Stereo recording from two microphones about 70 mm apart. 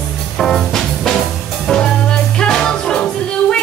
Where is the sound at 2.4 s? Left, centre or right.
Centre.